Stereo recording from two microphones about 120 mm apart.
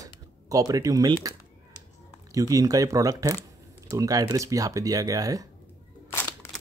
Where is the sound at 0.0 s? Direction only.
30° right (ahead or behind).